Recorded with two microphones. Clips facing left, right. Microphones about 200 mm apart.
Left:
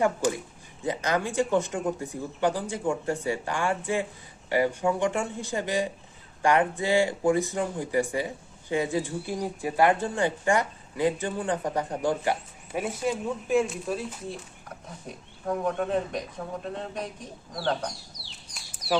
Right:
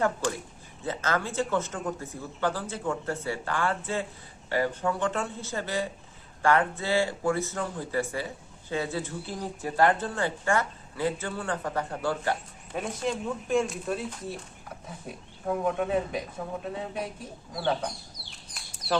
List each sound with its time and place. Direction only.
0.0 s speech: 15° left (ahead or behind); by 17.9 s 5° right (ahead or behind)
18.1 s chicken: 55° right (ahead or behind)